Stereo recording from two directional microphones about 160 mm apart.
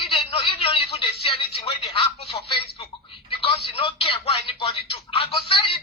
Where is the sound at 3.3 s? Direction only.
35° left (ahead or behind).